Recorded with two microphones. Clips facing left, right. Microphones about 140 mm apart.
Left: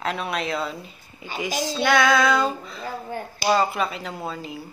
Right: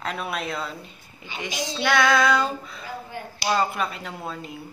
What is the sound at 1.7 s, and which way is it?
Speech, centre (ahead or behind).